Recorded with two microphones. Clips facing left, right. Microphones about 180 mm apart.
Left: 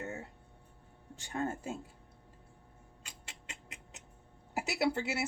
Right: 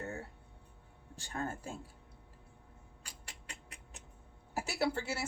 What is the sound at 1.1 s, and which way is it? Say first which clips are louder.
Speech: left 4 dB; 20° left (ahead or behind).